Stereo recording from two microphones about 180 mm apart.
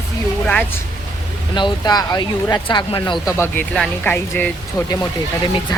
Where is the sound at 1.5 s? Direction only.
25° left (ahead or behind).